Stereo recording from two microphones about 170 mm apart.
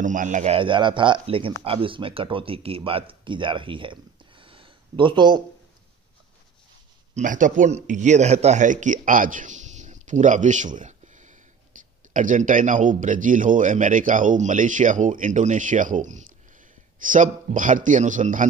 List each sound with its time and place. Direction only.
0.0 s speech: 50° right (ahead or behind)
0.6 s speech: 30° right (ahead or behind)
7.2 s a man's voice: 50° right (ahead or behind)
11.7 s a sound: 50° right (ahead or behind)
12.1 s speech: 50° right (ahead or behind)